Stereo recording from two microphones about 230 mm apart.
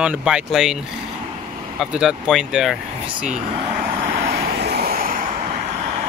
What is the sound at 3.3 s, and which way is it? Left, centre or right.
Speech, right.